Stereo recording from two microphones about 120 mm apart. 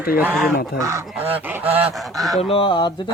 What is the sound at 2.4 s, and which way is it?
Fowl, 50° left (ahead or behind).